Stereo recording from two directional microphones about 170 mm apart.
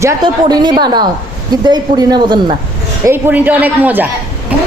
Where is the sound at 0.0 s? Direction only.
25° right (ahead or behind).